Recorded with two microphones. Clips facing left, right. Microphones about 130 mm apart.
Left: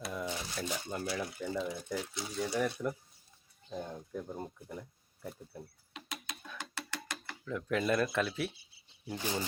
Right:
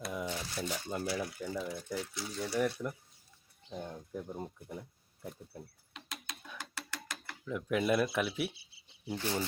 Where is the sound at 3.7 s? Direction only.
20° right (ahead or behind).